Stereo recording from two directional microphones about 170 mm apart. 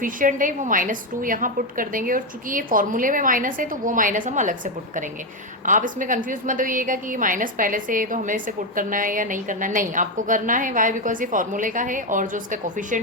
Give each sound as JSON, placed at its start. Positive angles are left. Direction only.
{"t": 0.0, "sound": "a woman's voice", "side_deg": -50}